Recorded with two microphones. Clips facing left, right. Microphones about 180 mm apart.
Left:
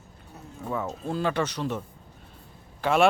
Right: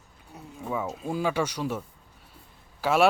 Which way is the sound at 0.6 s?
10° right (ahead or behind).